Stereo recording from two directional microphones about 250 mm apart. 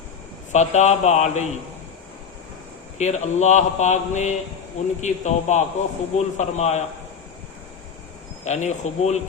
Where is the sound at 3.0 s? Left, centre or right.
Left.